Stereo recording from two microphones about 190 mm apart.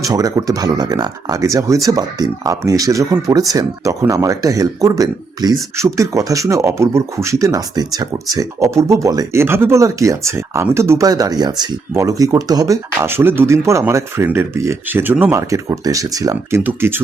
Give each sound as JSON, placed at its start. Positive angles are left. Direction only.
{"t": 0.0, "sound": "speech", "side_deg": -20}